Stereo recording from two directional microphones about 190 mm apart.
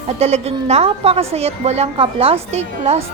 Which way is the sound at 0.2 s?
35° right (ahead or behind).